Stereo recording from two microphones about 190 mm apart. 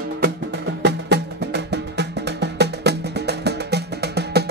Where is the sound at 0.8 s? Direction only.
60° right (ahead or behind).